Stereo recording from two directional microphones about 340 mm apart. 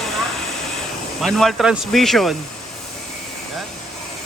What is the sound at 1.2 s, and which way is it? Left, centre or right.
A man's voice, centre.